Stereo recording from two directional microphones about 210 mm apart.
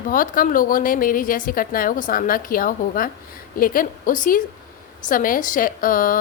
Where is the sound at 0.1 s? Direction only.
40° left (ahead or behind).